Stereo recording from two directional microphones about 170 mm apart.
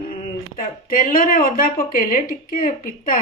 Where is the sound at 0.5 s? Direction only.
55° left (ahead or behind).